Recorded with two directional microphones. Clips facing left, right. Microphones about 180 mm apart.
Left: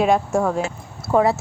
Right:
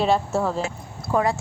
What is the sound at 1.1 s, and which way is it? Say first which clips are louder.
Speech: left 5 dB; 25° left (ahead or behind).